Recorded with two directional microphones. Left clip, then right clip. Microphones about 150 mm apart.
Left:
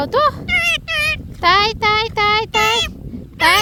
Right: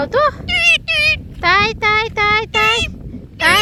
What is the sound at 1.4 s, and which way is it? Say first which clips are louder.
Speech: left 2 dB; 25° left (ahead or behind).